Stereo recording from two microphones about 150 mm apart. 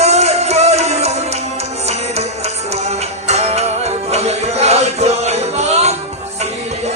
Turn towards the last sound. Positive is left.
turn(degrees=-45)  # may be behind; listen again after turning